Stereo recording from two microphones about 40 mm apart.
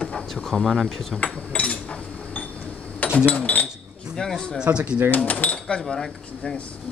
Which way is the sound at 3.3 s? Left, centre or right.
Left.